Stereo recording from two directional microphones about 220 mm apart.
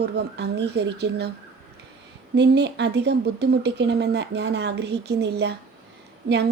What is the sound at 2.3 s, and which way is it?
Speech, 50° right (ahead or behind).